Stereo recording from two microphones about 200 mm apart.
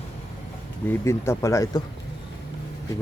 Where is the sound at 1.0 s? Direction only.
15° left (ahead or behind).